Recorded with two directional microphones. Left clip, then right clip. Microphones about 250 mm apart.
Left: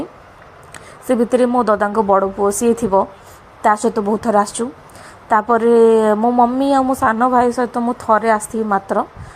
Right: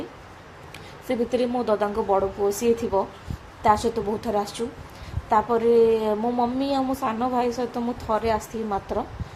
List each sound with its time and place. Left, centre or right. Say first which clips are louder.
1.3 s a woman's voice: left 9 dB; left